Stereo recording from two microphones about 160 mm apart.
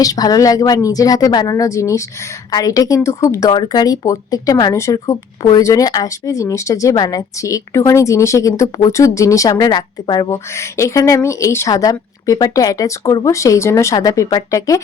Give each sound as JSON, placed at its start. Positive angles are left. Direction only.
{"t": 0.0, "sound": "speech", "side_deg": 25}